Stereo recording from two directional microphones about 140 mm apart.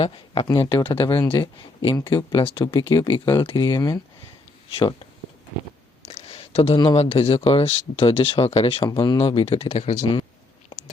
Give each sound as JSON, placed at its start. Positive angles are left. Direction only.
{"t": 0.0, "sound": "speech", "side_deg": 40}
{"t": 4.7, "sound": "speech", "side_deg": 40}
{"t": 6.1, "sound": "a sound", "side_deg": 45}
{"t": 6.7, "sound": "speech", "side_deg": 40}
{"t": 8.9, "sound": "speech", "side_deg": 30}
{"t": 10.0, "sound": "speech", "side_deg": 35}